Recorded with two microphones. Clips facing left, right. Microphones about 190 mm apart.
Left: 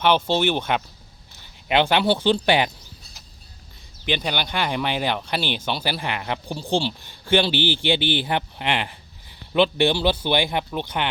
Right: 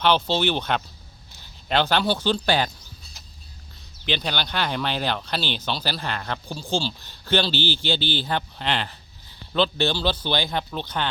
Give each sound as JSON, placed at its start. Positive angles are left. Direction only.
{"t": 0.0, "sound": "a man's voice", "side_deg": 10}
{"t": 4.0, "sound": "a man's voice", "side_deg": 10}
{"t": 7.5, "sound": "speech", "side_deg": 55}
{"t": 8.3, "sound": "a man's voice", "side_deg": 15}